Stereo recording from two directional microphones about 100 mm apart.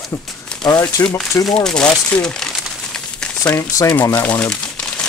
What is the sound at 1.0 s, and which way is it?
Speech, 25° left (ahead or behind).